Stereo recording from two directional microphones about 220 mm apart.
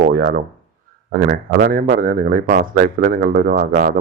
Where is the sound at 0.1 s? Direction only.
45° right (ahead or behind).